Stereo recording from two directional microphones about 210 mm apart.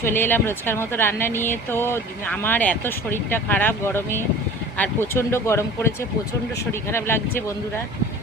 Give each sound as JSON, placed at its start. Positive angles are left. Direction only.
{"t": 0.0, "sound": "speech", "side_deg": 10}
{"t": 6.9, "sound": "speech", "side_deg": 10}